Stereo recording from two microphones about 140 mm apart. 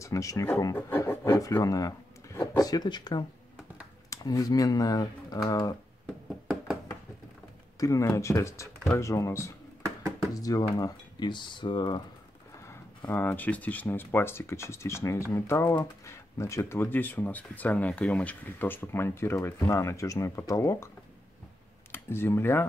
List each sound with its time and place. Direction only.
0.0 s speech: 25° left (ahead or behind)
6.4 s knock: 5° right (ahead or behind)
7.8 s speech: 20° left (ahead or behind)
12.6 s speech: 15° left (ahead or behind)
21.9 s speech: 15° left (ahead or behind)